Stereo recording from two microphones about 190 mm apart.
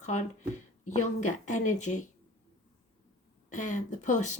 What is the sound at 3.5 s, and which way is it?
Speech, 40° left (ahead or behind).